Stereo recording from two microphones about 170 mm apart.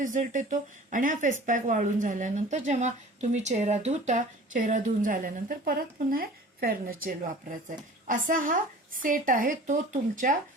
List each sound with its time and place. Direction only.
0.0 s speech: 50° right (ahead or behind)